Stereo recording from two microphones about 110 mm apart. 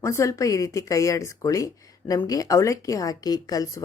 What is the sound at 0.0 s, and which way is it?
Speech, 30° left (ahead or behind).